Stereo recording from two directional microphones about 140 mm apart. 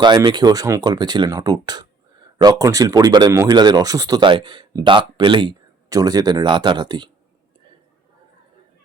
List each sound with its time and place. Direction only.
0.0 s speech: 30° right (ahead or behind)